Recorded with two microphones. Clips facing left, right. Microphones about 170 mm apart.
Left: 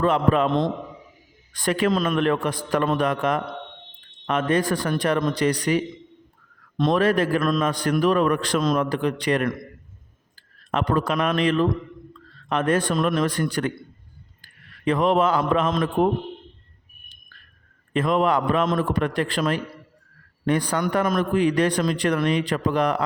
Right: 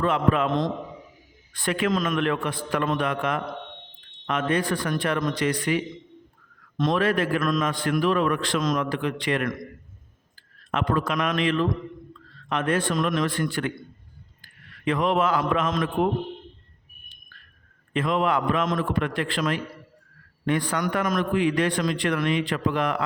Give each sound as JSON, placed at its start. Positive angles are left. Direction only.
{"t": 0.0, "sound": "a man's voice", "side_deg": 35}
{"t": 1.5, "sound": "a man's voice", "side_deg": 40}
{"t": 10.7, "sound": "a man's voice", "side_deg": 35}
{"t": 12.9, "sound": "a man's voice", "side_deg": 30}
{"t": 14.8, "sound": "a man's voice", "side_deg": 35}
{"t": 17.9, "sound": "a man's voice", "side_deg": 40}
{"t": 20.8, "sound": "a man's voice", "side_deg": 30}